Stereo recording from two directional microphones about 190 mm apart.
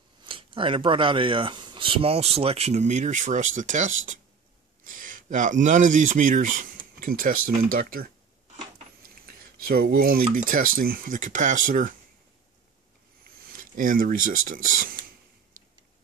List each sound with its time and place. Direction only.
0.2 s speech: 25° right (ahead or behind); by 8.1 s 50° right (ahead or behind)
9.2 s a sound: 50° right (ahead or behind)
10.2 s speech: 45° right (ahead or behind)
13.6 s speech: 45° right (ahead or behind)
14.3 s speech: 90° right